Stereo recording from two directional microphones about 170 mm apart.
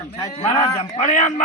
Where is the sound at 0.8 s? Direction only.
45° left (ahead or behind).